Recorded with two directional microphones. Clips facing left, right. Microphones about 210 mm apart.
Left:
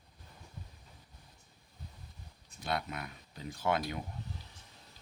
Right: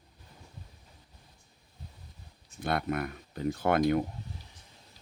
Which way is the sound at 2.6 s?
55° right (ahead or behind).